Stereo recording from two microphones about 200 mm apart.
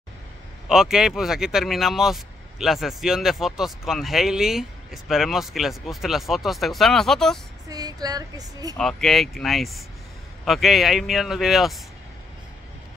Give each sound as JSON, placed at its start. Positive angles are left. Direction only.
{"t": 0.7, "sound": "speech", "side_deg": -5}
{"t": 7.7, "sound": "speech", "side_deg": -20}
{"t": 8.7, "sound": "speech", "side_deg": 0}